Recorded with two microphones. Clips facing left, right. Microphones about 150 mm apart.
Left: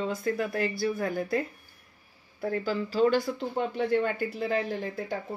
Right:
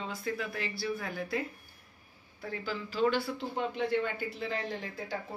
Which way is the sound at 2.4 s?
50° left (ahead or behind).